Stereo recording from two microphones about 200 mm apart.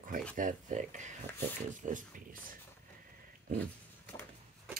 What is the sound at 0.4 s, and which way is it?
Speech, 40° right (ahead or behind).